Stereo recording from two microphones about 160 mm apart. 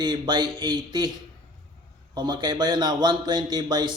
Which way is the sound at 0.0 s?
25° right (ahead or behind).